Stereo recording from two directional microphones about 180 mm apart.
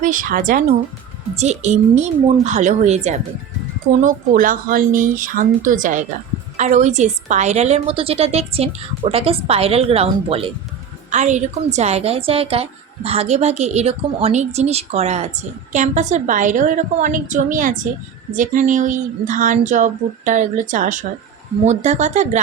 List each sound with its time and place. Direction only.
0.0 s a woman's voice: 50° right (ahead or behind)
4.0 s a woman's voice: 50° right (ahead or behind)